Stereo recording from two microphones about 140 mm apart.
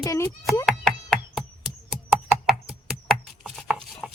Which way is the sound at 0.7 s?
5° left (ahead or behind).